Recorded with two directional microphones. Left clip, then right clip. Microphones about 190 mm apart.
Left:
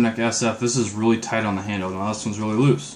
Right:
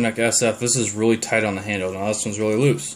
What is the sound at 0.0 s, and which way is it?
Speech, 20° right (ahead or behind).